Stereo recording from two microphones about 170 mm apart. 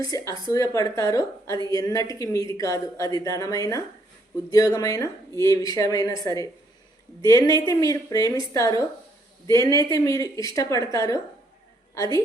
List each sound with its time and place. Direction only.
0.0 s speech: 20° left (ahead or behind)